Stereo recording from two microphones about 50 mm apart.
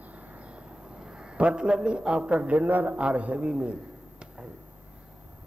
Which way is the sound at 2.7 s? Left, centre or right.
Right.